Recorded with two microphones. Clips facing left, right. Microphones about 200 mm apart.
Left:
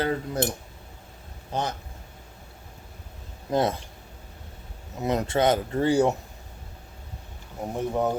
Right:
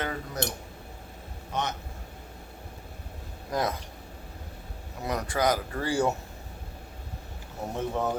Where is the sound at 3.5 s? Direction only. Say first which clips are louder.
Left 5 dB; 25° left (ahead or behind).